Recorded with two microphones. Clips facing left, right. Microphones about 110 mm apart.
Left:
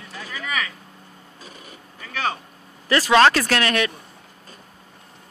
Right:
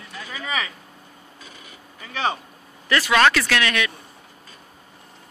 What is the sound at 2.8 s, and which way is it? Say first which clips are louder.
Speech: left 3 dB; 30° left (ahead or behind).